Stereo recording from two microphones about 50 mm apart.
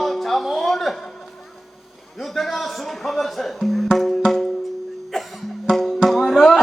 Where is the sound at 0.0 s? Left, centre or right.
Centre.